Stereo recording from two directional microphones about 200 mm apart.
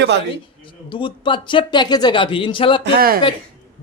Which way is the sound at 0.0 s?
60° right (ahead or behind).